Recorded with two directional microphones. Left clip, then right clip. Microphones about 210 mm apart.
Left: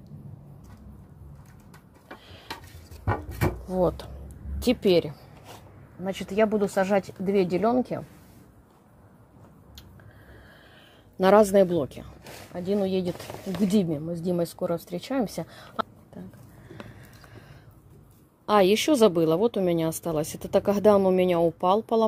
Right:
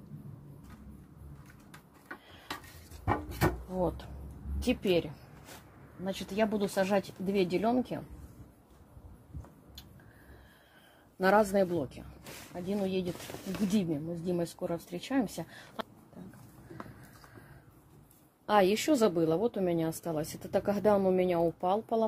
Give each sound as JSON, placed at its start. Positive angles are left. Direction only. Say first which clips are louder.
{"t": 3.6, "sound": "speech", "louder": "left 8 dB", "side_deg": 45}
{"t": 6.0, "sound": "speech", "louder": "left 7 dB", "side_deg": 25}
{"t": 11.1, "sound": "a woman's voice", "louder": "left 8 dB", "side_deg": 40}
{"t": 18.4, "sound": "a woman's voice", "louder": "left 6 dB", "side_deg": 30}